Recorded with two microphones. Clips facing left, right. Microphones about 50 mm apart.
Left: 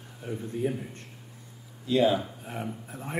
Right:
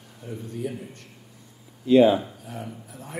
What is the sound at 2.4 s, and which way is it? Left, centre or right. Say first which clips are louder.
Speech: left 1 dB; left.